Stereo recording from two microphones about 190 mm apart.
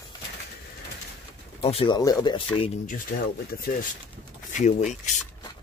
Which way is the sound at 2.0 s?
20° left (ahead or behind).